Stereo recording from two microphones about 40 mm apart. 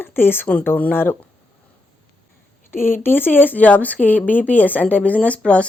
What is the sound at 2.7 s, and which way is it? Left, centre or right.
Speech, left.